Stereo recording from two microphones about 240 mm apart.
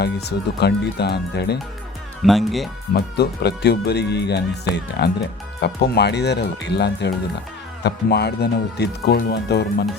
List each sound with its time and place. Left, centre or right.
0.0 s speech: left
2.2 s speech: centre
2.9 s speech: left